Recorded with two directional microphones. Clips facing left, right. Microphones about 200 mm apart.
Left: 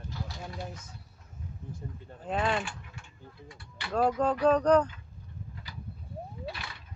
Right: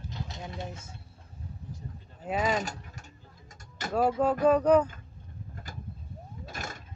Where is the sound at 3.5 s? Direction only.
45° right (ahead or behind).